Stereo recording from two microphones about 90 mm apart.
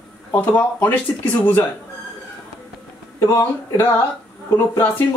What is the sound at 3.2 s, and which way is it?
Speech, 30° left (ahead or behind).